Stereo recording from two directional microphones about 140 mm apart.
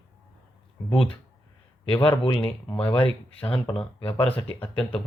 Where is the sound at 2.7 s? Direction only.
10° left (ahead or behind).